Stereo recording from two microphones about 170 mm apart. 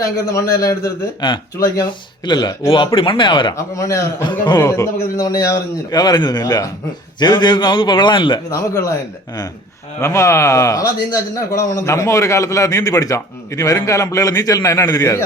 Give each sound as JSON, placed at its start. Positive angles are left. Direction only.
{"t": 0.0, "sound": "speech", "side_deg": 20}